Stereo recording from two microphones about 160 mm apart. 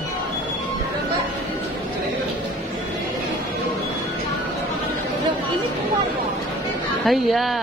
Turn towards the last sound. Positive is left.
turn(degrees=0)  # may be behind; listen again after turning